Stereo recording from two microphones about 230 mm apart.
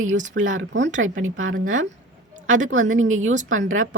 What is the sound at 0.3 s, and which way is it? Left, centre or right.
Speech, right.